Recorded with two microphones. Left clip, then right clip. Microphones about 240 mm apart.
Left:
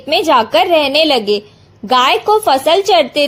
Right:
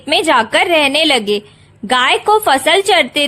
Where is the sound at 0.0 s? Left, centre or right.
Right.